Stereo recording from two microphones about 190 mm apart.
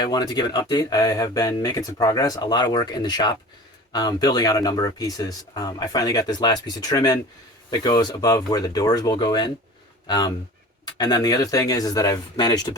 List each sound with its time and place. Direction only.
0.0 s speech: 20° left (ahead or behind)